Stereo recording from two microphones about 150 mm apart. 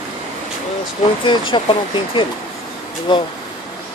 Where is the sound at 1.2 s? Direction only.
35° left (ahead or behind).